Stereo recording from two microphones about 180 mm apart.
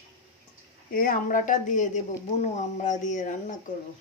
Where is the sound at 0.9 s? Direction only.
50° left (ahead or behind).